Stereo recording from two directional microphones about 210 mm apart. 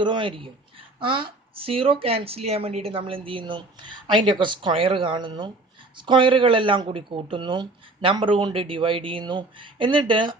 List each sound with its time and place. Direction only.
0.0 s speech: 25° right (ahead or behind)